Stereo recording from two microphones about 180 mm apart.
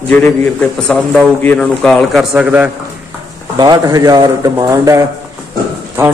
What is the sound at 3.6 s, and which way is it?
A man's voice, 20° right (ahead or behind).